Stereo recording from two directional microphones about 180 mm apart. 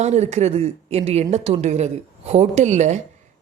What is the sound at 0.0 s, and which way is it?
Speech, 40° right (ahead or behind).